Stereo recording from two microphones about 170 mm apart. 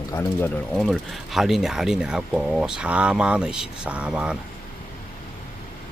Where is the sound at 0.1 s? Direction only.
15° left (ahead or behind).